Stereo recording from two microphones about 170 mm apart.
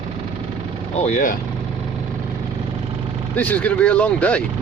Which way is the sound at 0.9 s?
45° left (ahead or behind).